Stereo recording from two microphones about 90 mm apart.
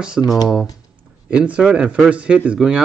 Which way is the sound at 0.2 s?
Centre (ahead or behind).